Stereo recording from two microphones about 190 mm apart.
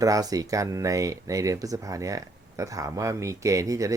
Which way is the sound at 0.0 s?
20° right (ahead or behind).